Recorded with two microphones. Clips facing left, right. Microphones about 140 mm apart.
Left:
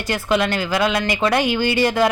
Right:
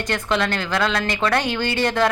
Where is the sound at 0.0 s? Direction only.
5° left (ahead or behind).